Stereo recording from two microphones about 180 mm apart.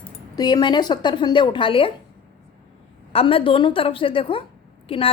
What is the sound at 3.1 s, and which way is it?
A woman's voice, 30° left (ahead or behind).